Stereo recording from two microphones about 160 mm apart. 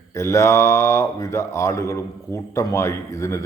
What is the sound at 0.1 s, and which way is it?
Speech, 15° left (ahead or behind).